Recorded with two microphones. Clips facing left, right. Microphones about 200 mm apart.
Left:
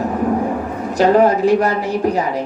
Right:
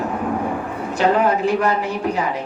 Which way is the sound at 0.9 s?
40° left (ahead or behind).